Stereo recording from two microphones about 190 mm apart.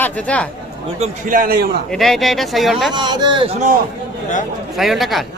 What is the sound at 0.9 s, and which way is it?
Speech, 40° right (ahead or behind).